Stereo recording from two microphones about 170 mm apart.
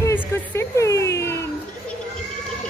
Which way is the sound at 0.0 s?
15° left (ahead or behind).